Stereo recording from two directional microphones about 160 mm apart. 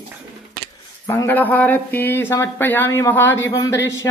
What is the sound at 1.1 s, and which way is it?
Speech, 15° left (ahead or behind).